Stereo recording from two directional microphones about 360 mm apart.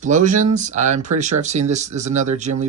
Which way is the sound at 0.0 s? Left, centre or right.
Right.